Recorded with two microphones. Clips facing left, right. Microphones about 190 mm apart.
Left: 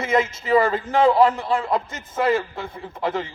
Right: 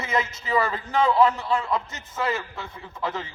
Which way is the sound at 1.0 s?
30° left (ahead or behind).